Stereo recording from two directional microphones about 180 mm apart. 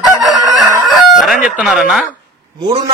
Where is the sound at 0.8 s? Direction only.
Centre (ahead or behind).